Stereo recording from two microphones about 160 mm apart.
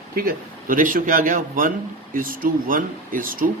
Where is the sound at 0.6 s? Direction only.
60° right (ahead or behind).